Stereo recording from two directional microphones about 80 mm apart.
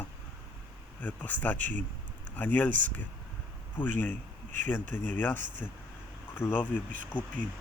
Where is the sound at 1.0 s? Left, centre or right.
Left.